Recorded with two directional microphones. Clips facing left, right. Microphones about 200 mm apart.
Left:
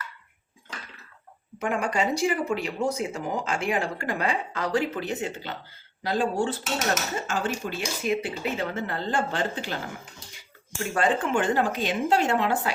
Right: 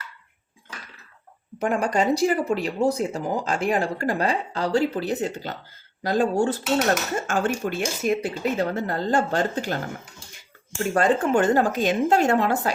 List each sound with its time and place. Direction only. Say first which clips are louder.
1.5 s speech: right 4 dB; 40° right (ahead or behind)
10.9 s speech: right 4 dB; 40° right (ahead or behind)